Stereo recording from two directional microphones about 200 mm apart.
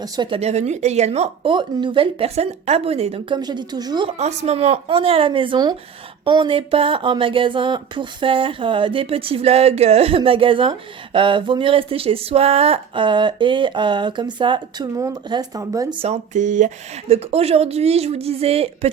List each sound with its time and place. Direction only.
0.0 s speech: 25° right (ahead or behind)
4.2 s speech: 35° right (ahead or behind); by 16.0 s 15° right (ahead or behind)
16.0 s speech: 35° right (ahead or behind)